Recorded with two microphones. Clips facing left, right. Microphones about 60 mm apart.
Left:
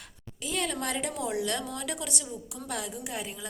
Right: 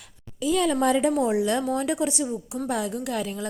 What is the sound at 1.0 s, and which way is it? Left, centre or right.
A woman's voice, right.